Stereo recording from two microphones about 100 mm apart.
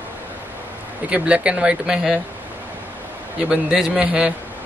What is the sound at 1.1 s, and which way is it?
Speech, 10° right (ahead or behind).